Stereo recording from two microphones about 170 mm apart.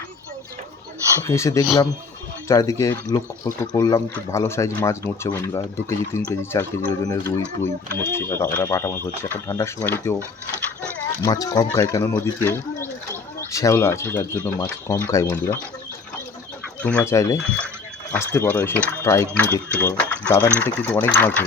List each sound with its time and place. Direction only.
1.2 s speech: 15° left (ahead or behind)
11.2 s speech: 20° left (ahead or behind)
16.8 s speech: 10° left (ahead or behind)